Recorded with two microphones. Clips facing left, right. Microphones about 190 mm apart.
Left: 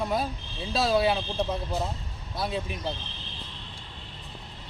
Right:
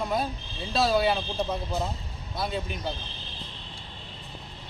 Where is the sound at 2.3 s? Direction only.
Centre (ahead or behind).